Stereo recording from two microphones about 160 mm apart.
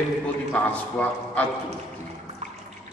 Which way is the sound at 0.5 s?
10° left (ahead or behind).